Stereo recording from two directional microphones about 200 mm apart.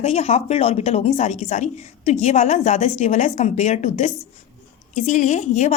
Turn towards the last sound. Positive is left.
turn(degrees=35)  # may be behind; listen again after turning